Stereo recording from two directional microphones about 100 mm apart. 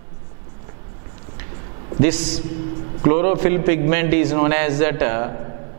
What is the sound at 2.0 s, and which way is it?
A man's voice, 5° right (ahead or behind).